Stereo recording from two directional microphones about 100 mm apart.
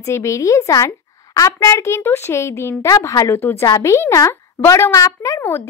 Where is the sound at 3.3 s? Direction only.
25° left (ahead or behind).